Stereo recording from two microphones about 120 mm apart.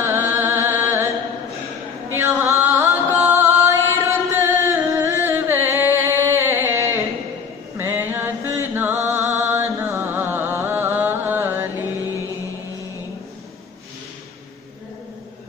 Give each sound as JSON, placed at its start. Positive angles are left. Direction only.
{"t": 0.0, "sound": "music", "side_deg": -20}
{"t": 2.0, "sound": "music", "side_deg": -20}